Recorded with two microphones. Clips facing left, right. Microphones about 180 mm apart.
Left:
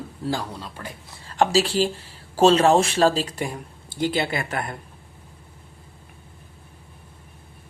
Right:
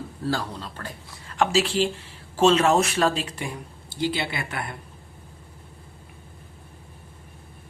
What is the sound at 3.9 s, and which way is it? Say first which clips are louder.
Speech: left 3 dB; 50° left (ahead or behind).